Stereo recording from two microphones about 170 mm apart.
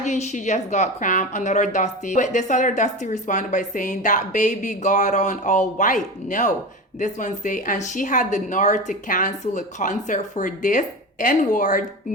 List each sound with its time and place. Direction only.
0.0 s a woman's voice: 45° left (ahead or behind)